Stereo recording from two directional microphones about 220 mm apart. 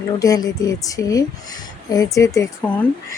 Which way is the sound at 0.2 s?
15° left (ahead or behind).